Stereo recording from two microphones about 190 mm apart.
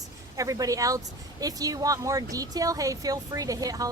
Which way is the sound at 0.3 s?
15° right (ahead or behind).